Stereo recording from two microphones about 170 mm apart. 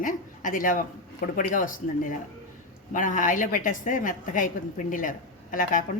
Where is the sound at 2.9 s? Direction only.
50° left (ahead or behind).